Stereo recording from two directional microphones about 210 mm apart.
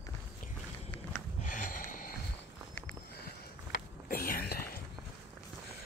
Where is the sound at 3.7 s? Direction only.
45° left (ahead or behind).